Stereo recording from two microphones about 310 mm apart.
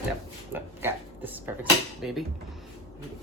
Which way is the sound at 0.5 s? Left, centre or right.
Centre.